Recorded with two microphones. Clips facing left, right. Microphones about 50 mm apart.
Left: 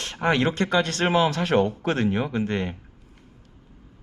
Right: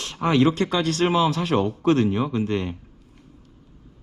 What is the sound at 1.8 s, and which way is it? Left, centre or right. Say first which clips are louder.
Speech: right 5 dB; centre.